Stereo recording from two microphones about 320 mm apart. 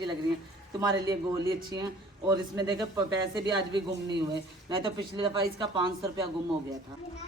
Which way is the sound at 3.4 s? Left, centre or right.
Right.